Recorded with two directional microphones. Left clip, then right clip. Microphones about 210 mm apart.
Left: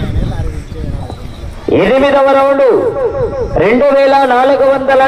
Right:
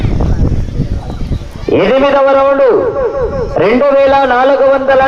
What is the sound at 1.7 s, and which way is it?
A man's voice, 20° left (ahead or behind).